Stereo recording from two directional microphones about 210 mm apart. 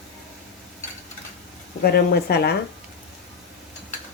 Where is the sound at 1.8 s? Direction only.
50° left (ahead or behind).